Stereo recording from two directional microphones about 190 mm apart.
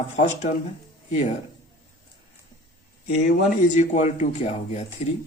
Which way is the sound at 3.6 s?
40° left (ahead or behind).